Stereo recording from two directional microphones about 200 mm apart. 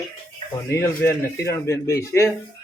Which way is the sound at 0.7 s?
10° left (ahead or behind).